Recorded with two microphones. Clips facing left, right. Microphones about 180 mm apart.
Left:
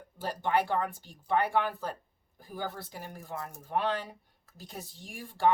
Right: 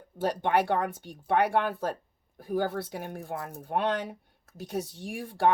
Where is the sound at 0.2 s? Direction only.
70° right (ahead or behind).